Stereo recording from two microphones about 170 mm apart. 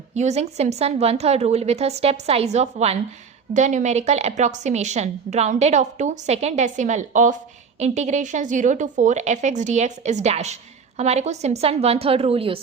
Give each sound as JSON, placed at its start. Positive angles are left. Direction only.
{"t": 0.1, "sound": "a woman's voice", "side_deg": -40}